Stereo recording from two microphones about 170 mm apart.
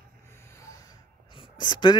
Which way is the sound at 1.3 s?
25° left (ahead or behind).